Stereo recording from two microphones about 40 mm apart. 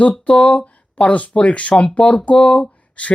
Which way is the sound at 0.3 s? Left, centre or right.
Left.